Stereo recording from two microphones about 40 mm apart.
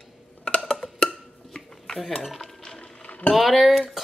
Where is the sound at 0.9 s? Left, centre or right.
Centre.